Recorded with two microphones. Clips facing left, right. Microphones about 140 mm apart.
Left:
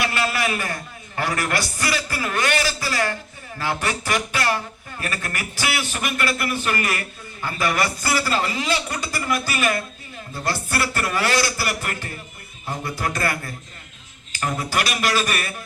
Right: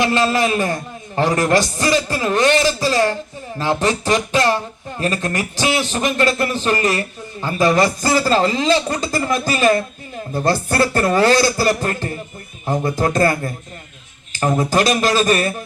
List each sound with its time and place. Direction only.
0.0 s a man's voice: 25° right (ahead or behind)
10.3 s a woman's voice: 45° right (ahead or behind)
10.7 s a man's voice: 25° right (ahead or behind)
14.6 s speech: 40° right (ahead or behind)